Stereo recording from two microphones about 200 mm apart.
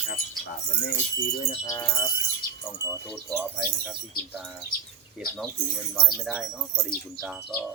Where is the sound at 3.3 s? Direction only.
15° right (ahead or behind).